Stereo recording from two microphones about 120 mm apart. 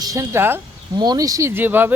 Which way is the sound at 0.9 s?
35° right (ahead or behind).